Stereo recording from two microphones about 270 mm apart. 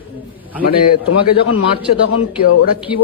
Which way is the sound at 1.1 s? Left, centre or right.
Left.